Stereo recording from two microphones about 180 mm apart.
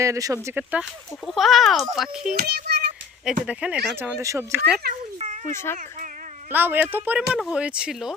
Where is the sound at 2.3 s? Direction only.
60° right (ahead or behind).